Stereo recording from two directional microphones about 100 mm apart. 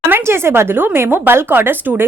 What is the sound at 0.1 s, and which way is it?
Speech, 25° right (ahead or behind).